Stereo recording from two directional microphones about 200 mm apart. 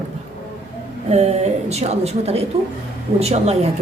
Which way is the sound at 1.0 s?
35° right (ahead or behind).